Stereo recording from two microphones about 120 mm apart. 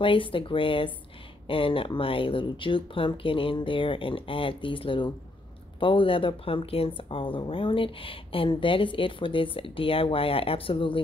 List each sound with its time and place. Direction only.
0.0 s speech: 45° left (ahead or behind)